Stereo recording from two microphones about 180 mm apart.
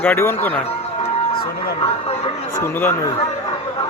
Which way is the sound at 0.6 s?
35° left (ahead or behind).